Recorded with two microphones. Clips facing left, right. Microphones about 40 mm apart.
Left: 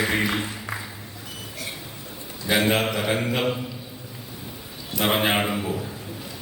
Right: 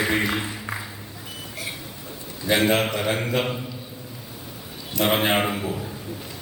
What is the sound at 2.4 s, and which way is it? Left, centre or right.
A man's voice, centre.